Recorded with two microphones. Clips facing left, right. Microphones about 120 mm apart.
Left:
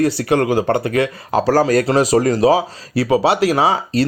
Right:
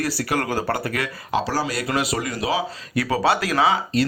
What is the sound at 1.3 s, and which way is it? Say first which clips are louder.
Speech: left 9 dB; 45° left (ahead or behind).